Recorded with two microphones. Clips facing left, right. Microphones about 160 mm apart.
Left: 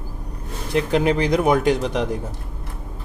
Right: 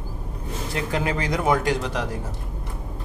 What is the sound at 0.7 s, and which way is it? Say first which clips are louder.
Speech: left 8 dB; 20° left (ahead or behind).